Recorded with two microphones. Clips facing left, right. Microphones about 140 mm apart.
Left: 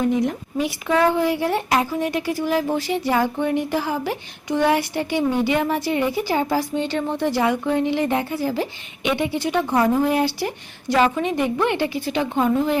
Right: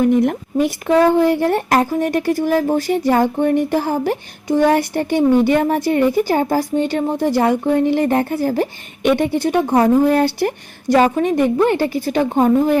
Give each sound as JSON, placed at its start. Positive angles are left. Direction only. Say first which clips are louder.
{"t": 0.1, "sound": "speech", "louder": "right 6 dB", "side_deg": -55}